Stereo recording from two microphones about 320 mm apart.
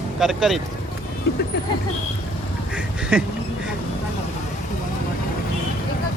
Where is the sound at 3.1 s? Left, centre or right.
Centre.